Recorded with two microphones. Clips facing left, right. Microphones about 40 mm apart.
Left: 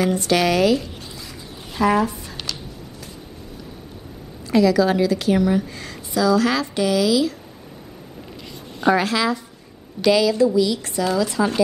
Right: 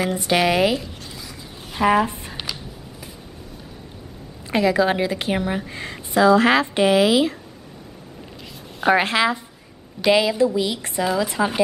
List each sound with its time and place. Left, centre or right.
0.0 s speech: centre
1.8 s a sound: right
4.5 s a woman's voice: right
8.9 s a woman's voice: right